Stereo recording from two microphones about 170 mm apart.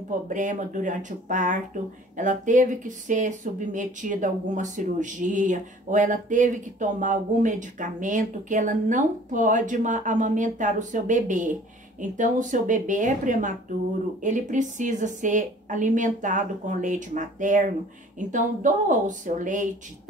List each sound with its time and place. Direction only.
0.3 s speech: 50° right (ahead or behind)